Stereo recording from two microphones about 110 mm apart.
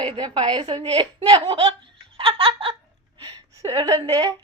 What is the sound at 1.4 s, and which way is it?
Speech, 60° right (ahead or behind).